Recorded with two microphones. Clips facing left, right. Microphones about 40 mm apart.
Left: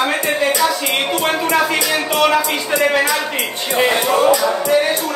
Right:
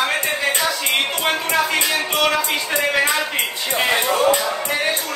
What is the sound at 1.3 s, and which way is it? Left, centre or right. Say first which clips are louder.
Music: left 3 dB; centre.